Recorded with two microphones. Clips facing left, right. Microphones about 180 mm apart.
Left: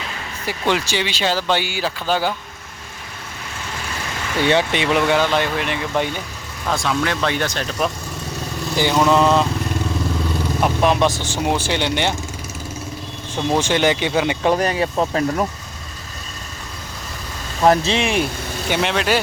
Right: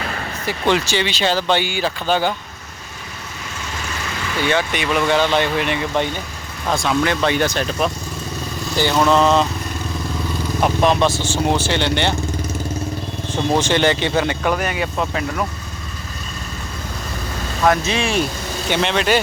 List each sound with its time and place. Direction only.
0.7 s speech: 10° left (ahead or behind)
4.4 s speech: 25° left (ahead or behind)
5.0 s speech: 5° left (ahead or behind)
8.7 s speech: 15° left (ahead or behind)
10.6 s speech: 5° left (ahead or behind)
13.6 s speech: 10° left (ahead or behind)
14.4 s speech: 30° left (ahead or behind)
17.6 s speech: 30° left (ahead or behind)
18.7 s speech: 5° left (ahead or behind)